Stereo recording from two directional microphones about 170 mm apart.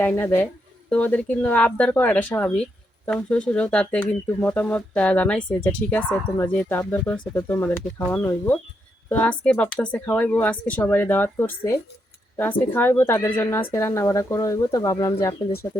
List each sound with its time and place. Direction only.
0.0 s speech: 10° left (ahead or behind)